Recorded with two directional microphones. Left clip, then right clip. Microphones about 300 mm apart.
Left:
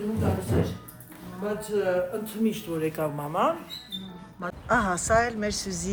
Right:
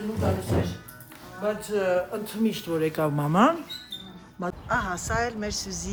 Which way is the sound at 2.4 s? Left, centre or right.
Right.